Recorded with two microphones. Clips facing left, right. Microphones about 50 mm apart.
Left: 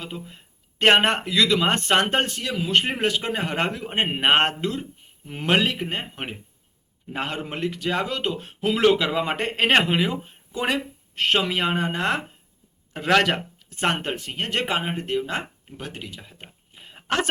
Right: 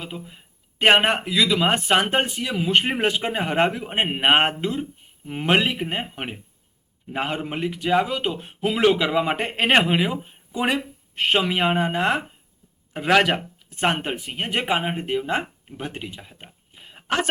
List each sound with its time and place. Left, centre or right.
0.0 s speech: centre
2.5 s speech: right